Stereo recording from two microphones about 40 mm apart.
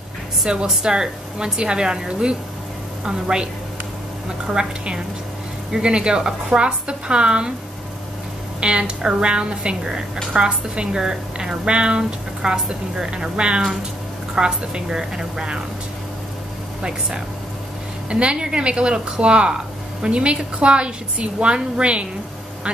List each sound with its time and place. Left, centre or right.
0.4 s a woman's voice: centre
4.5 s a woman's voice: centre
8.5 s a woman's voice: right
18.1 s a woman's voice: right